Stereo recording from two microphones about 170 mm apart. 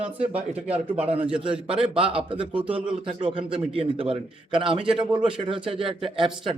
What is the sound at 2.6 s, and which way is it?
Speech, 5° right (ahead or behind).